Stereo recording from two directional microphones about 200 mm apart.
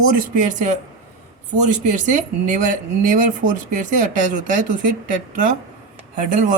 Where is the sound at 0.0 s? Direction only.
40° right (ahead or behind).